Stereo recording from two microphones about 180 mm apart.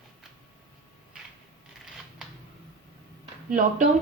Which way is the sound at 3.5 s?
50° right (ahead or behind).